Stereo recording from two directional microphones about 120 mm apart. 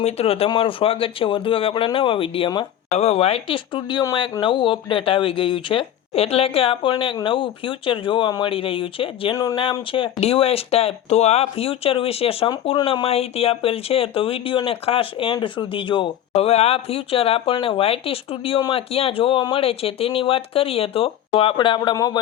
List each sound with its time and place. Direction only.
0.0 s speech: 55° left (ahead or behind)
2.9 s speech: 60° left (ahead or behind)
3.8 s speech: 40° left (ahead or behind)
9.3 s speech: 30° left (ahead or behind)
9.9 s speech: 55° left (ahead or behind)
21.9 s speech: 30° left (ahead or behind)